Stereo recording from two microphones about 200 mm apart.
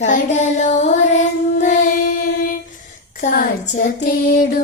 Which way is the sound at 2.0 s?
55° left (ahead or behind).